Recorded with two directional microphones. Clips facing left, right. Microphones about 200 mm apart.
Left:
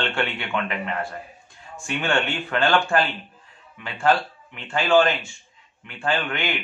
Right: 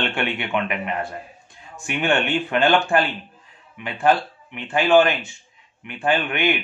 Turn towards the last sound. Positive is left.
turn(degrees=-20)  # may be behind; listen again after turning